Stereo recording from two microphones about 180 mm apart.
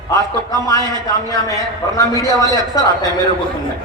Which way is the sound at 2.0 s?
20° left (ahead or behind).